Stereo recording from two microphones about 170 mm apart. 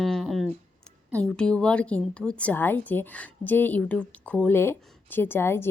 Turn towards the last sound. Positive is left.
turn(degrees=15)  # may be behind; listen again after turning